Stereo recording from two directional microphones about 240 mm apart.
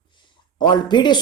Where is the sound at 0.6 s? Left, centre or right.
Centre.